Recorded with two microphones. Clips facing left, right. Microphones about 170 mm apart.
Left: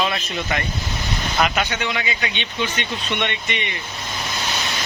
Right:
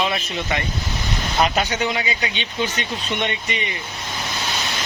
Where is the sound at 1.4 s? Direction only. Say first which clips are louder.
Right 2 dB; 35° right (ahead or behind).